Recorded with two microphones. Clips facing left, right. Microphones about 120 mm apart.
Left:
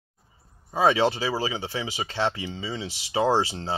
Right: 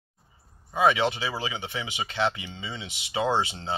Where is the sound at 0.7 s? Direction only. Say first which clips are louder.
Left 2 dB; 35° left (ahead or behind).